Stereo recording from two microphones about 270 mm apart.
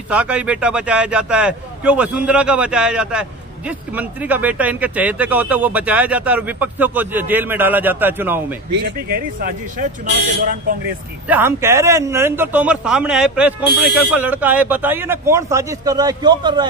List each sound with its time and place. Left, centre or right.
0.1 s a man's voice: centre
8.7 s speech: right
11.2 s a man's voice: centre